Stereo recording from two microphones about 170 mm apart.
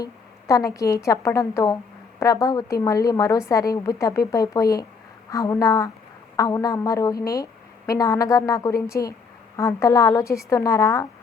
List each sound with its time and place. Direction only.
0.0 s a woman's voice: 20° left (ahead or behind)